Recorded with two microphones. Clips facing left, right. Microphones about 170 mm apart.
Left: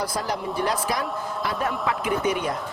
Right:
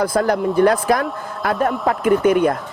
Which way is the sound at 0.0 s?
55° right (ahead or behind).